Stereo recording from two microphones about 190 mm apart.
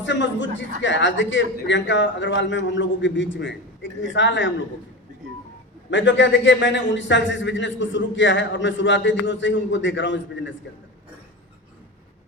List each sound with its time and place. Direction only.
0.0 s a man's voice: 75° left (ahead or behind)
5.9 s a man's voice: 75° left (ahead or behind)